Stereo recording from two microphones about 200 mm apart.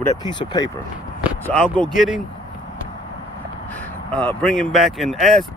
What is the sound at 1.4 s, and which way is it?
Speech, 5° left (ahead or behind).